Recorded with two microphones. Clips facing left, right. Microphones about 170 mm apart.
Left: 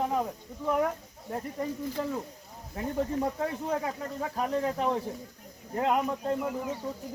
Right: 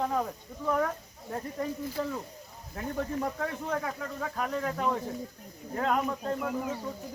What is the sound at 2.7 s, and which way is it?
Speech, 20° left (ahead or behind).